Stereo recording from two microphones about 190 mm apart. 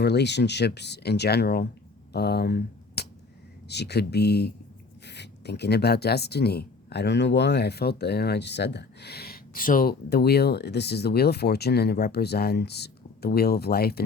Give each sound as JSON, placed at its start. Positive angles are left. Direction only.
{"t": 0.0, "sound": "speech", "side_deg": 60}